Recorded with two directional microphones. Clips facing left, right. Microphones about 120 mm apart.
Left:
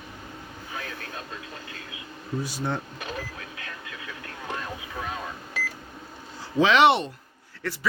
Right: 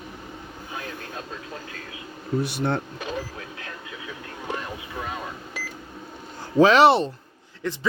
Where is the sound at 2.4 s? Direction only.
65° right (ahead or behind).